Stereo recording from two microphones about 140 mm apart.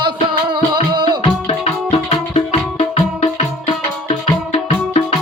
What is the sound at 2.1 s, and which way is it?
Music, 45° left (ahead or behind).